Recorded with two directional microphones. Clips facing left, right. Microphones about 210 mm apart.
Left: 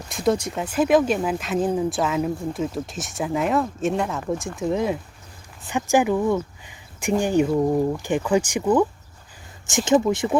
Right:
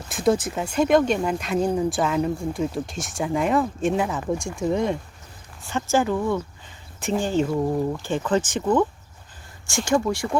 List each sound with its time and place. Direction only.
0.1 s speech: centre (ahead or behind)
5.6 s speech: 15° left (ahead or behind)
9.6 s speech: 20° left (ahead or behind)